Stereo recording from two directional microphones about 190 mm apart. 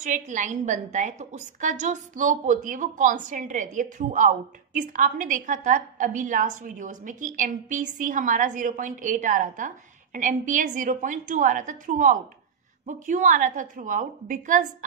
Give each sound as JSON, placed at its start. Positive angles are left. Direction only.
{"t": 0.0, "sound": "a woman's voice", "side_deg": -40}